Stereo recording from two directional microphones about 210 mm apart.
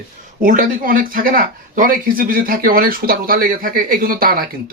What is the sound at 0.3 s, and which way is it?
Speech, 40° right (ahead or behind).